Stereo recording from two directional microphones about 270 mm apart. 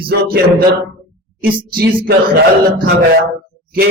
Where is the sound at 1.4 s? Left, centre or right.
Right.